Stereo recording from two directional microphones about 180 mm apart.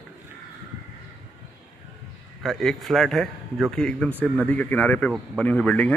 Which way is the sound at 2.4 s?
Centre (ahead or behind).